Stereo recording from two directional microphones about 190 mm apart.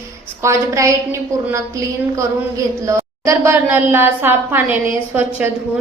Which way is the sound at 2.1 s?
15° right (ahead or behind).